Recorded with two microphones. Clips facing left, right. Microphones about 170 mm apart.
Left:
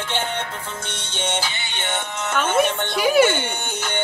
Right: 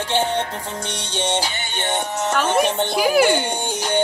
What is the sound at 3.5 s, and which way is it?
Music, 35° right (ahead or behind).